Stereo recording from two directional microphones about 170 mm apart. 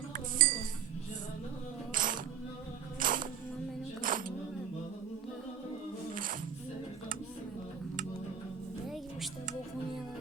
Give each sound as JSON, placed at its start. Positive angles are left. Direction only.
{"t": 0.1, "sound": "music", "side_deg": -55}
{"t": 1.9, "sound": "music", "side_deg": -50}
{"t": 4.0, "sound": "a sound", "side_deg": -55}
{"t": 6.1, "sound": "music", "side_deg": -55}